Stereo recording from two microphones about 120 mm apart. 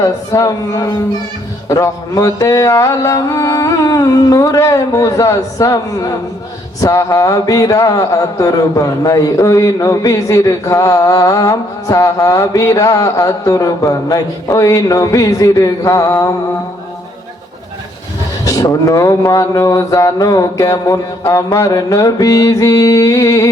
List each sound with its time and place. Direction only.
0.0 s speech: 25° left (ahead or behind)
18.4 s speech: 30° left (ahead or behind)